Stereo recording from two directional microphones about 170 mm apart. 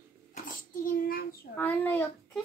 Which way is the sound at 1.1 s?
60° left (ahead or behind).